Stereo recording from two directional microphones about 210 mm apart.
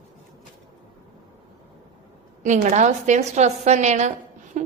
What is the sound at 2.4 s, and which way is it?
A woman's voice, 35° right (ahead or behind).